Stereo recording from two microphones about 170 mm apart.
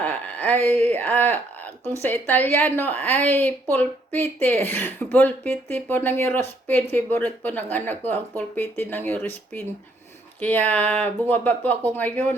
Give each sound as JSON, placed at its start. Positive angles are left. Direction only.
{"t": 0.0, "sound": "speech", "side_deg": 10}